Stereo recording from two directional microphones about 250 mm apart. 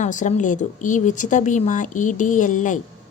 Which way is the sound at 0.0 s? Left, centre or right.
Left.